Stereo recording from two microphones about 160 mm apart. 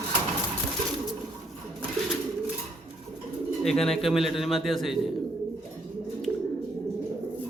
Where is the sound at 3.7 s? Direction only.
5° left (ahead or behind).